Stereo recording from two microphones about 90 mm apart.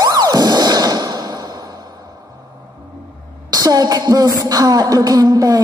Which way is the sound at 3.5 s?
45° right (ahead or behind).